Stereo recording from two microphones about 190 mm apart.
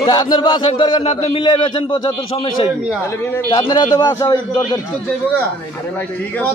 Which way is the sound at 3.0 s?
15° left (ahead or behind).